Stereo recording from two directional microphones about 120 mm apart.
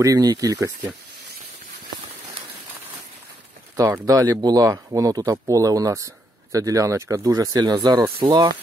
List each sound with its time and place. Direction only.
0.0 s speech: 30° right (ahead or behind)
3.7 s speech: 25° right (ahead or behind)